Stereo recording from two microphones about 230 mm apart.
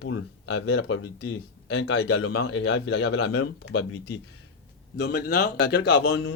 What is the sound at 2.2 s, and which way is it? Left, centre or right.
A man's voice, left.